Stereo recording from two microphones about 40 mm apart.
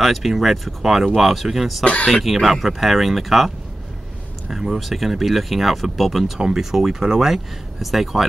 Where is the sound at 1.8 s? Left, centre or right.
Left.